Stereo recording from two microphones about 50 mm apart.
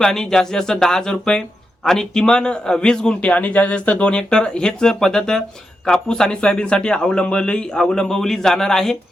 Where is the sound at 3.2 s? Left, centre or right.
Left; by 9.0 s centre.